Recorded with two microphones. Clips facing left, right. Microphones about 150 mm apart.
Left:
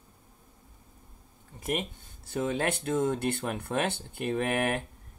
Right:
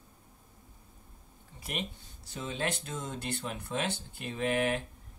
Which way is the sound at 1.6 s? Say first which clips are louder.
Left 7 dB; 50° left (ahead or behind).